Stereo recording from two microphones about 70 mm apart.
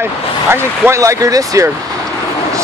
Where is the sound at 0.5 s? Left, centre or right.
Right.